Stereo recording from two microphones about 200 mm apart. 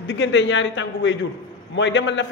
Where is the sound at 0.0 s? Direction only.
60° left (ahead or behind).